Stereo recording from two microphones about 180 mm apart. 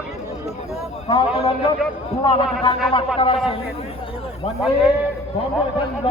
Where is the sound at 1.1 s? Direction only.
30° left (ahead or behind).